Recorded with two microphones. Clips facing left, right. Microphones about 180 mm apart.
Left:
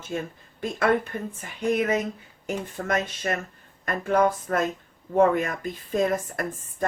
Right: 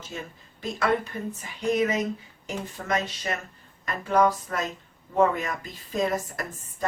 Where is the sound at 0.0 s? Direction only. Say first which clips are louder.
Left 6 dB; 55° left (ahead or behind).